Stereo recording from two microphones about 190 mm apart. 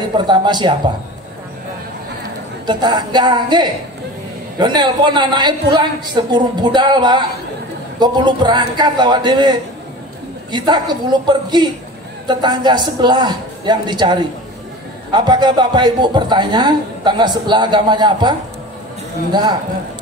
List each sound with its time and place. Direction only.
0.3 s a man's voice: 25° right (ahead or behind)
2.6 s a man's voice: 25° right (ahead or behind)